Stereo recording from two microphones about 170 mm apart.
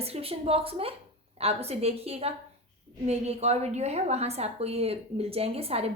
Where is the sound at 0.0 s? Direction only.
35° right (ahead or behind).